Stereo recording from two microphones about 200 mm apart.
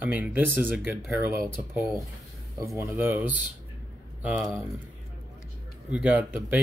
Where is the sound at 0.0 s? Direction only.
5° right (ahead or behind).